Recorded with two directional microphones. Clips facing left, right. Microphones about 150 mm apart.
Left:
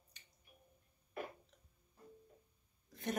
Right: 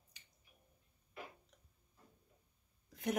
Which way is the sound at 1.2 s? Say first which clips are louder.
Left 6 dB; 55° left (ahead or behind).